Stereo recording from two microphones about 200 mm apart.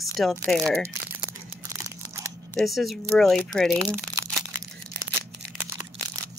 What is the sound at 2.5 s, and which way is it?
Speech, centre (ahead or behind).